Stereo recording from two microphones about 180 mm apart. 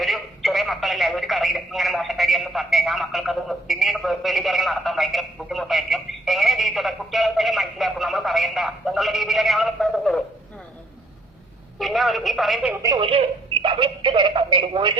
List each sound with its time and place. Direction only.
0.0 s speech: centre (ahead or behind)
11.8 s speech: centre (ahead or behind)
12.7 s speech: 20° right (ahead or behind)